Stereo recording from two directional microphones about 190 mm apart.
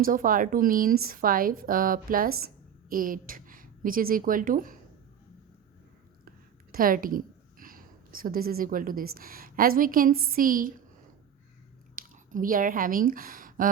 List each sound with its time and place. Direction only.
0.0 s a woman's voice: 45° right (ahead or behind)
6.2 s a woman's voice: 50° right (ahead or behind)
11.9 s speech: 45° right (ahead or behind)